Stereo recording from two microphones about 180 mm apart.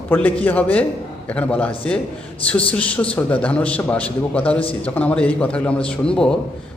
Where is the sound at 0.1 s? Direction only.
10° left (ahead or behind).